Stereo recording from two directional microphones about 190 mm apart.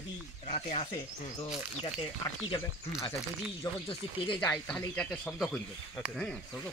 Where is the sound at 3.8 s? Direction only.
30° left (ahead or behind).